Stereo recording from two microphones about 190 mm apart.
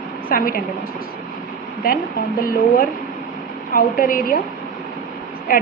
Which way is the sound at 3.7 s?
45° left (ahead or behind).